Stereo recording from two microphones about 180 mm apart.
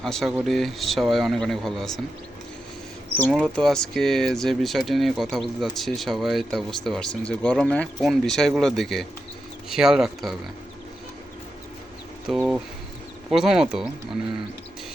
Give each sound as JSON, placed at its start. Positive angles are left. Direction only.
{"t": 0.0, "sound": "speech", "side_deg": 0}
{"t": 3.3, "sound": "speech", "side_deg": 5}
{"t": 12.3, "sound": "speech", "side_deg": 0}